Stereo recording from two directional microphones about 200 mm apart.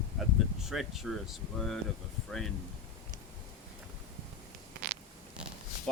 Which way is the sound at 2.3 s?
Centre (ahead or behind).